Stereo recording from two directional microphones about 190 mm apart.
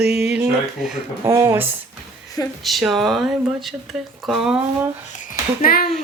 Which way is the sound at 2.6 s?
Centre (ahead or behind).